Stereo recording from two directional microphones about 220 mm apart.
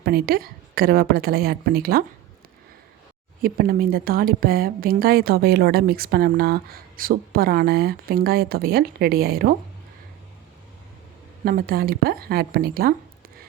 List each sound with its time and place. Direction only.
0.0 s speech: 45° right (ahead or behind)
3.4 s speech: 40° right (ahead or behind)
11.4 s speech: 40° right (ahead or behind)